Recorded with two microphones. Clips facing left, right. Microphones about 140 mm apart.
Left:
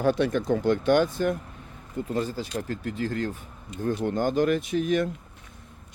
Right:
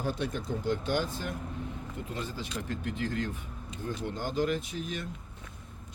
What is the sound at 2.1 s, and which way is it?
Speech, 40° left (ahead or behind).